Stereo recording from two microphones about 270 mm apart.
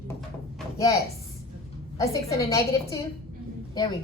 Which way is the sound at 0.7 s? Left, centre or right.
Centre.